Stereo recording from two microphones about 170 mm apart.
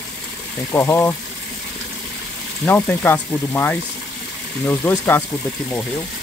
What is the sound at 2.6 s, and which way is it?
Speech, 10° left (ahead or behind).